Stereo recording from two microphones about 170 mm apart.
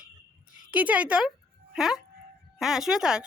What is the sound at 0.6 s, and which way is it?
A woman's voice, 10° right (ahead or behind).